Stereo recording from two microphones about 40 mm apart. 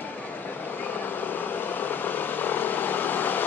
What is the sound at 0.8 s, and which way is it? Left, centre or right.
Vehicle, left.